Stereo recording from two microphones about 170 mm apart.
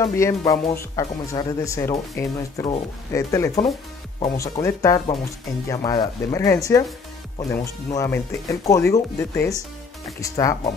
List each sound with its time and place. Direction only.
0.0 s speech: 15° left (ahead or behind)